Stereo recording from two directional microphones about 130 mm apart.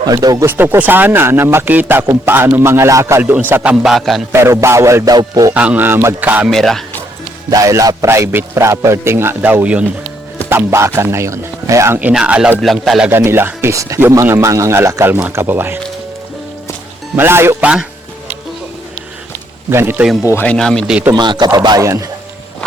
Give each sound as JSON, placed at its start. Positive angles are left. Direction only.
{"t": 0.0, "sound": "speech", "side_deg": -30}
{"t": 0.4, "sound": "a man's voice", "side_deg": -15}
{"t": 4.3, "sound": "speech", "side_deg": -20}
{"t": 5.5, "sound": "a man's voice", "side_deg": -10}
{"t": 6.5, "sound": "speech", "side_deg": 5}
{"t": 7.5, "sound": "speech", "side_deg": -25}
{"t": 11.9, "sound": "speech", "side_deg": -10}
{"t": 13.1, "sound": "speech", "side_deg": -15}
{"t": 17.2, "sound": "a man's voice", "side_deg": -20}
{"t": 19.7, "sound": "a man's voice", "side_deg": -15}
{"t": 20.4, "sound": "speech", "side_deg": 5}
{"t": 21.1, "sound": "speech", "side_deg": -35}